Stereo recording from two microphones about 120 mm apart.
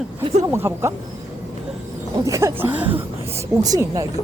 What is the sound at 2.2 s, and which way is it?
Speech, 25° right (ahead or behind).